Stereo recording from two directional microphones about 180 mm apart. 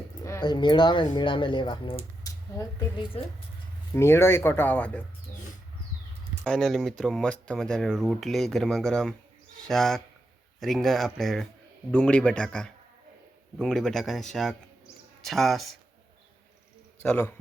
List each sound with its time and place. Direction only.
0.3 s speech: 20° left (ahead or behind)
3.9 s speech: 15° left (ahead or behind)
6.4 s speech: 5° left (ahead or behind)
17.0 s speech: 10° left (ahead or behind)